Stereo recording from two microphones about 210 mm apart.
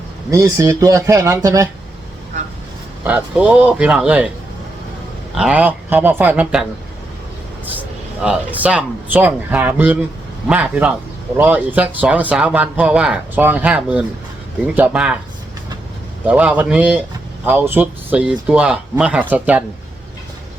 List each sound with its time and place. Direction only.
0.3 s speech: 15° right (ahead or behind)
3.1 s speech: 5° right (ahead or behind)
5.3 s speech: 5° right (ahead or behind)
8.2 s speech: 5° right (ahead or behind)
16.2 s speech: 5° right (ahead or behind)